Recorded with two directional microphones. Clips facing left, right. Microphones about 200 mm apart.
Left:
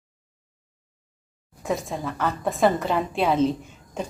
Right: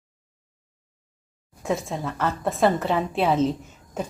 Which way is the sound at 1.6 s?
Centre (ahead or behind).